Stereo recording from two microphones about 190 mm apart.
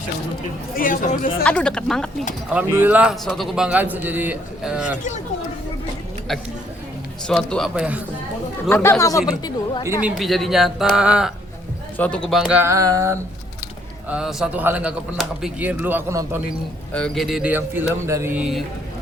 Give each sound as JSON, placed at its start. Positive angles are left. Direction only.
{"t": 0.8, "sound": "speech", "side_deg": 45}
{"t": 1.5, "sound": "speech", "side_deg": 5}
{"t": 2.5, "sound": "a man's voice", "side_deg": -10}
{"t": 7.3, "sound": "speech", "side_deg": 0}
{"t": 8.7, "sound": "speech", "side_deg": 15}
{"t": 10.0, "sound": "speech", "side_deg": 0}
{"t": 11.9, "sound": "a man's voice", "side_deg": 5}
{"t": 14.1, "sound": "a man's voice", "side_deg": -5}
{"t": 16.9, "sound": "a man's voice", "side_deg": 5}